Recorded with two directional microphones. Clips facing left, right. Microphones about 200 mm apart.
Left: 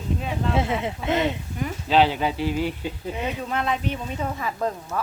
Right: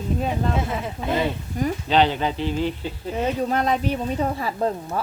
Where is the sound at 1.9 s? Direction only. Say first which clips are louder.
Left 1 dB; 5° left (ahead or behind).